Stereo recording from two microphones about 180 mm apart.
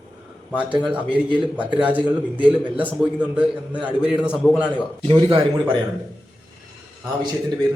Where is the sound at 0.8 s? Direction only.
10° right (ahead or behind).